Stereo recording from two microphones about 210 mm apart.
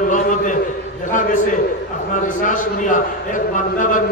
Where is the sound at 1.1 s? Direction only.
40° left (ahead or behind).